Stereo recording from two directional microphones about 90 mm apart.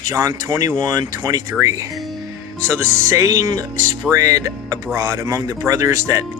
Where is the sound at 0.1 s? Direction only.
40° right (ahead or behind).